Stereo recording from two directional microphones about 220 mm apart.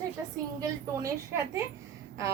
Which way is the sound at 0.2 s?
15° right (ahead or behind).